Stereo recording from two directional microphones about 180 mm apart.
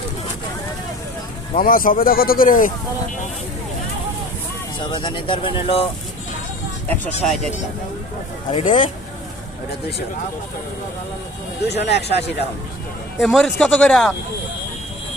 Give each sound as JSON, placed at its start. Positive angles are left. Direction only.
{"t": 1.5, "sound": "speech", "side_deg": 50}
{"t": 4.8, "sound": "speech", "side_deg": 25}
{"t": 6.8, "sound": "speech", "side_deg": 10}
{"t": 8.5, "sound": "speech", "side_deg": 45}
{"t": 11.6, "sound": "speech", "side_deg": 70}
{"t": 13.1, "sound": "speech", "side_deg": 0}